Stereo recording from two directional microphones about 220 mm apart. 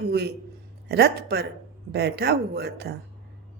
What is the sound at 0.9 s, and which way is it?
A woman's voice, 50° right (ahead or behind).